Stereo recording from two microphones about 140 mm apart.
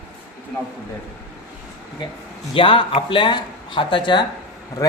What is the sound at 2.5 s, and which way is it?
Speech, 40° left (ahead or behind).